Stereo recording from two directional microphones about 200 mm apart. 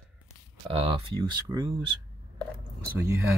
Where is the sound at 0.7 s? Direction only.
25° right (ahead or behind).